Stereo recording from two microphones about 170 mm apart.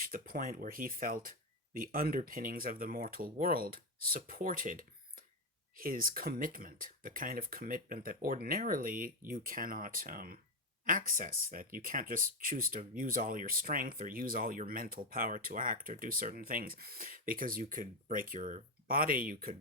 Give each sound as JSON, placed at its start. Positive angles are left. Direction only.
{"t": 0.0, "sound": "speech", "side_deg": -55}